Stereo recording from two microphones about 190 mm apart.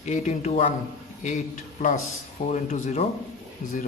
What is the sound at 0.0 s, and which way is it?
Speech, 35° left (ahead or behind).